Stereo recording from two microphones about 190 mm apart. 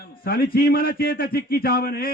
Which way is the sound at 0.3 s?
50° left (ahead or behind).